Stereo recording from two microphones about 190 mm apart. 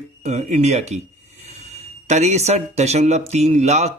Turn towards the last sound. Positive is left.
turn(degrees=-35)  # may be behind; listen again after turning